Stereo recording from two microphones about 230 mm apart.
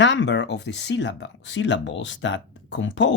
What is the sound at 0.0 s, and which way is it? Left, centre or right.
Speech, left.